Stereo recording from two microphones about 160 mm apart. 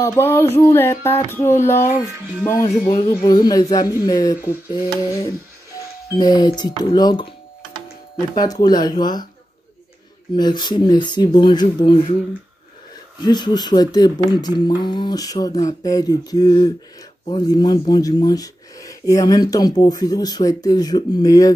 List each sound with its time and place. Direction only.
0.0 s a sound: 15° left (ahead or behind)
2.9 s speech: 25° left (ahead or behind)
6.1 s speech: 25° left (ahead or behind)
8.4 s speech: 25° left (ahead or behind)
10.3 s speech: 25° left (ahead or behind)
13.2 s speech: 25° left (ahead or behind)